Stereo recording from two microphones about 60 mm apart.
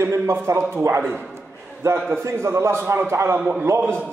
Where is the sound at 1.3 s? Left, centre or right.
Right.